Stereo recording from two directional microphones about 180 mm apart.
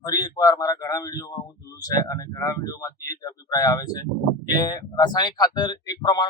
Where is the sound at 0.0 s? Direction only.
20° left (ahead or behind).